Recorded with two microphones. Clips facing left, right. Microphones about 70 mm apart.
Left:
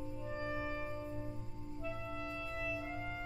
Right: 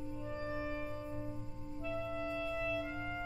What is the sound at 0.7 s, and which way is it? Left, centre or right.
Music, centre.